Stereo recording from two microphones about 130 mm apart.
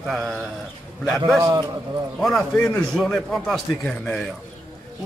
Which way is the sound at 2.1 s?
5° left (ahead or behind).